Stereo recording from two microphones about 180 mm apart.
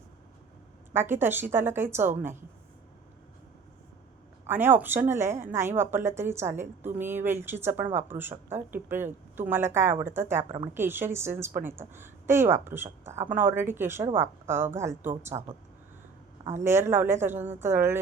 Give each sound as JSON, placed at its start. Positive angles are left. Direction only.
{"t": 0.9, "sound": "a woman's voice", "side_deg": -10}
{"t": 4.4, "sound": "a woman's voice", "side_deg": -10}
{"t": 16.6, "sound": "a woman's voice", "side_deg": -15}